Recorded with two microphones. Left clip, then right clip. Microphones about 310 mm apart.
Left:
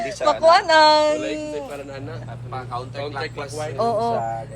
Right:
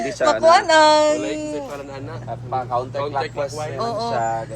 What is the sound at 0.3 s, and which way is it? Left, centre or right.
Speech, centre.